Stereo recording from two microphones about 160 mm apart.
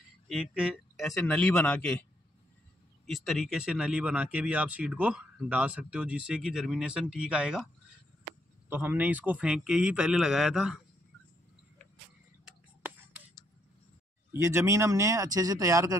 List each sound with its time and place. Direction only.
0.3 s a man's voice: 5° right (ahead or behind)
3.1 s speech: centre (ahead or behind)
8.6 s a man's voice: 10° right (ahead or behind)
14.3 s speech: 15° right (ahead or behind)